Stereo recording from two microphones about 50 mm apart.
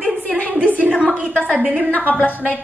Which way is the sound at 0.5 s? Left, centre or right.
Left.